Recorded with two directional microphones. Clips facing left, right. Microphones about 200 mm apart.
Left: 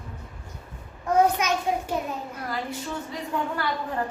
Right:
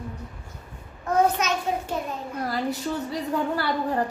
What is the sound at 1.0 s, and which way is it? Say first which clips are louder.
Speech: left 1 dB; 10° left (ahead or behind).